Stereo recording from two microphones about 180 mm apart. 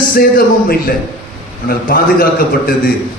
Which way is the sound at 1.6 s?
55° left (ahead or behind).